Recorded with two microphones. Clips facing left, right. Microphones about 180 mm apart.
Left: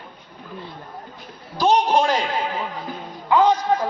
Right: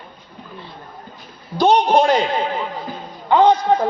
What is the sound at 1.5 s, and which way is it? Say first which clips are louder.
Speech: right 3 dB; 30° right (ahead or behind).